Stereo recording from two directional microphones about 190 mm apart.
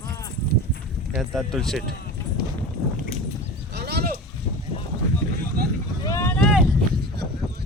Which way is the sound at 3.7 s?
55° right (ahead or behind).